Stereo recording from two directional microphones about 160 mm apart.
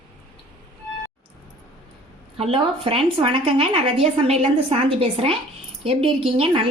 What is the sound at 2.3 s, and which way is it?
Speech, 35° right (ahead or behind).